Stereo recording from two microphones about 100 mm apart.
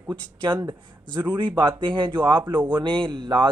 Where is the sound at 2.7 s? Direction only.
55° right (ahead or behind).